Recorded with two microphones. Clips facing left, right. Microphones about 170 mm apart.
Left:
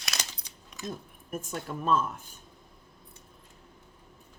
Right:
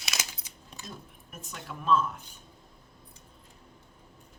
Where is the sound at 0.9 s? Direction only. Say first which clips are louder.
Left 10 dB; 50° left (ahead or behind).